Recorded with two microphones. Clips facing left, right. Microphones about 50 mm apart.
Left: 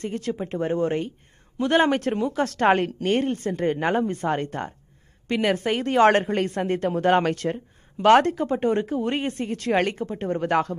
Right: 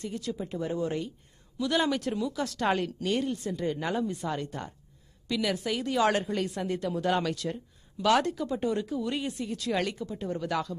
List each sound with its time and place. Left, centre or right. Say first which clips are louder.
0.0 s a woman's voice: left 6 dB; left